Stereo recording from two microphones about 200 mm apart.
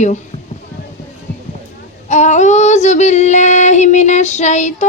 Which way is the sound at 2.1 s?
35° left (ahead or behind).